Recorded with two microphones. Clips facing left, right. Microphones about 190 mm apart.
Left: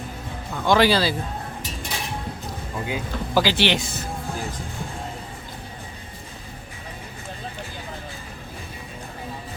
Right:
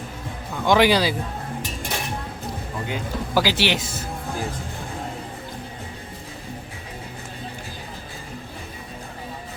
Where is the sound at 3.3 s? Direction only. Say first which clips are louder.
Left 1 dB; 10° right (ahead or behind).